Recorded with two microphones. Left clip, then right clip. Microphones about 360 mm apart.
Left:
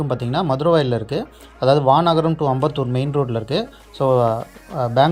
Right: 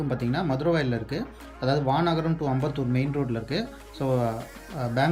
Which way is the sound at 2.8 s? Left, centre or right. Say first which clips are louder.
Left 7 dB; left.